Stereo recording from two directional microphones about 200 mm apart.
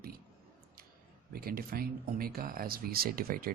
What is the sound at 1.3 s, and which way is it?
Speech, 45° right (ahead or behind).